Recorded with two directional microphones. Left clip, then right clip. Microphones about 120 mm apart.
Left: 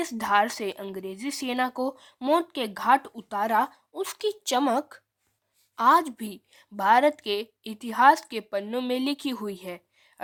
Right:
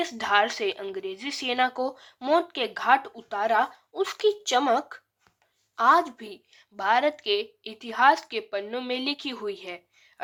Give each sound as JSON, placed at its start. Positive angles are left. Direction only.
{"t": 0.0, "sound": "speech", "side_deg": 65}
{"t": 5.7, "sound": "a woman's voice", "side_deg": 90}